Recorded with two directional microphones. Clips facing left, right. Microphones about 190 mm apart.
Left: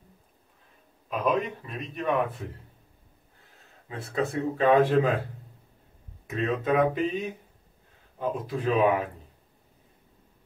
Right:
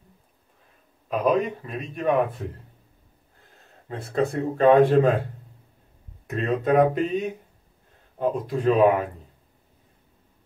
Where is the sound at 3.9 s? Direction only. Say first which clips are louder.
Right 4 dB; centre (ahead or behind).